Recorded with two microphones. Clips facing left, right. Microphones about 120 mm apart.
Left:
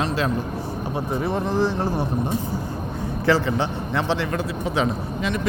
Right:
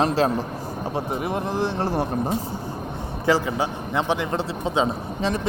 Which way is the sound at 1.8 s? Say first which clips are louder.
Even; 35° right (ahead or behind).